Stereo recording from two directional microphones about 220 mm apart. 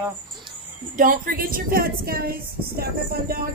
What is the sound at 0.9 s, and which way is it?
A woman's voice, 40° right (ahead or behind).